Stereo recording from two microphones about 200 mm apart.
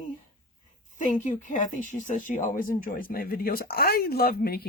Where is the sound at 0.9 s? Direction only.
40° left (ahead or behind).